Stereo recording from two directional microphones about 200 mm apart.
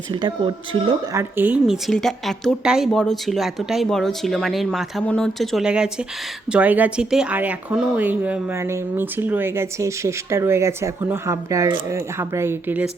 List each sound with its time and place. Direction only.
0.1 s speech: 25° right (ahead or behind)
1.2 s a woman's voice: 10° right (ahead or behind)